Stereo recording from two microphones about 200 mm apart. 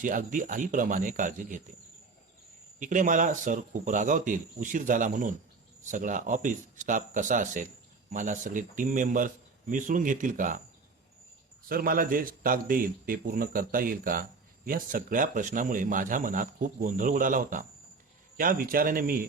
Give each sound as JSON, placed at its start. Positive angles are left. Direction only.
{"t": 0.0, "sound": "speech", "side_deg": -40}
{"t": 2.7, "sound": "speech", "side_deg": -40}
{"t": 11.7, "sound": "a man's voice", "side_deg": -45}